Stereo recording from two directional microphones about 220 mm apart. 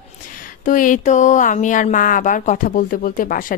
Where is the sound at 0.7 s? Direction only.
35° left (ahead or behind).